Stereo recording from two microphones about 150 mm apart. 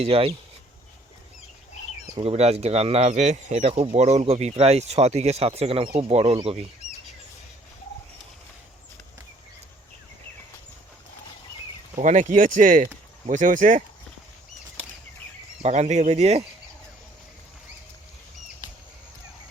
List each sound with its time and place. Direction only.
0.0 s speech: 40° right (ahead or behind)
2.1 s speech: 40° right (ahead or behind)
11.9 s speech: 55° right (ahead or behind)
15.6 s speech: 50° right (ahead or behind)